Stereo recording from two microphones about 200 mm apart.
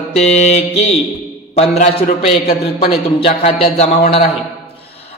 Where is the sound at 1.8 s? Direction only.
30° left (ahead or behind).